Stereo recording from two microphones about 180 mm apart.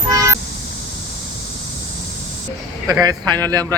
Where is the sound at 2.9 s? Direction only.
20° right (ahead or behind).